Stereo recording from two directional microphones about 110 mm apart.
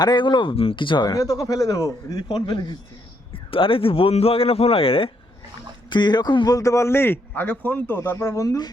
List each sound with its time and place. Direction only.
0.0 s speech: 40° left (ahead or behind)
2.2 s speech: 45° left (ahead or behind)
3.3 s speech: 55° left (ahead or behind)
5.9 s a man's voice: 40° left (ahead or behind)